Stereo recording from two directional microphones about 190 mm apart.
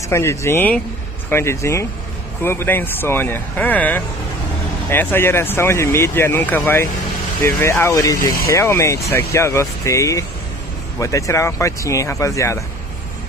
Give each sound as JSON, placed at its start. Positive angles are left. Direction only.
{"t": 0.1, "sound": "speech", "side_deg": 15}